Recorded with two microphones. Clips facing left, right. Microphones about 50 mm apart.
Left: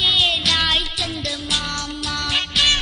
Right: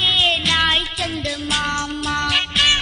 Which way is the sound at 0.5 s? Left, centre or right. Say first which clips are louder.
Right 2 dB; centre.